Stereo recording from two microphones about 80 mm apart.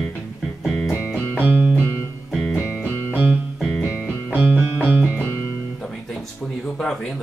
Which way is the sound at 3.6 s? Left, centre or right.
Centre.